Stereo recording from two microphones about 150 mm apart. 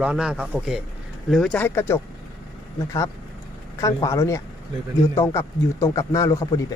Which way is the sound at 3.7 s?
20° left (ahead or behind).